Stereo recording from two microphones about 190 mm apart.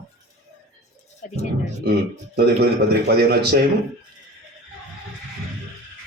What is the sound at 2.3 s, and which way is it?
Speech, 60° right (ahead or behind).